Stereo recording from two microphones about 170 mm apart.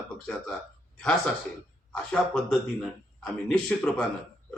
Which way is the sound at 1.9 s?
5° left (ahead or behind).